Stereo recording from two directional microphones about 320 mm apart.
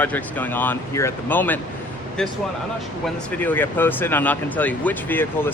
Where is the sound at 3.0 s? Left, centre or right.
Centre.